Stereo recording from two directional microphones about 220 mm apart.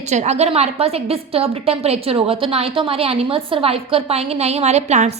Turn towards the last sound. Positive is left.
turn(degrees=-30)  # may be behind; listen again after turning